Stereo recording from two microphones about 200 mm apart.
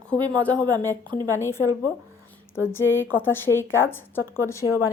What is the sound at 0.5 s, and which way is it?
Speech, 20° right (ahead or behind).